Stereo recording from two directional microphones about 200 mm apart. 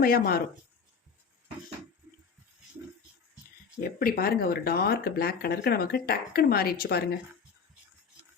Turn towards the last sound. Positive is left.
turn(degrees=50)  # may be behind; listen again after turning